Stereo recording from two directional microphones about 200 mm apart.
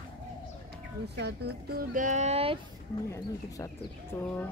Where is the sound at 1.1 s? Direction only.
55° right (ahead or behind); by 2.6 s 30° right (ahead or behind).